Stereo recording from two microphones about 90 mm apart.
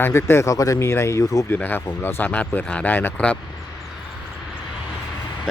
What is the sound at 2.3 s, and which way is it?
Speech, 15° left (ahead or behind).